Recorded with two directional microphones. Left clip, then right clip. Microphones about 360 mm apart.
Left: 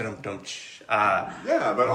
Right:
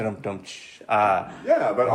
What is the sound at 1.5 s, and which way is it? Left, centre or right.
Speech, right.